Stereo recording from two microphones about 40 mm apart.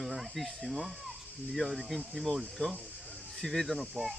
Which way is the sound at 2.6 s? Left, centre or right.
Left.